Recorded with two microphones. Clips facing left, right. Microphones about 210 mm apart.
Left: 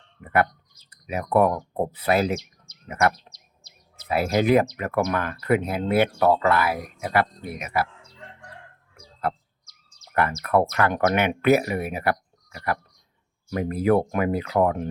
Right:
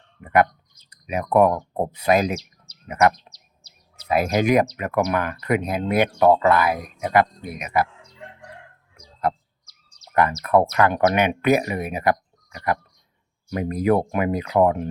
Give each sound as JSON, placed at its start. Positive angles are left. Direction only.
{"t": 1.0, "sound": "speech", "side_deg": -15}
{"t": 10.5, "sound": "speech", "side_deg": -15}